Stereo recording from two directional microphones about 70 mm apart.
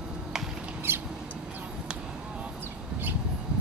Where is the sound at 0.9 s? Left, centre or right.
Right.